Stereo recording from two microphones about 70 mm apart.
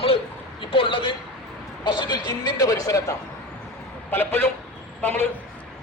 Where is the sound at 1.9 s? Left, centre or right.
Left.